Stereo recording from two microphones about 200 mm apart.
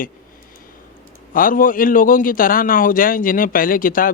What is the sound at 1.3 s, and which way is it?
A man's voice, 45° left (ahead or behind).